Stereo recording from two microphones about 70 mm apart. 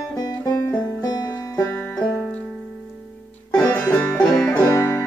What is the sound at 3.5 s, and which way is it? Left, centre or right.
Music, left.